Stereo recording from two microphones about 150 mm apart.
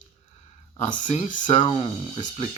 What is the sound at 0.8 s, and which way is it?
Speech, 60° left (ahead or behind).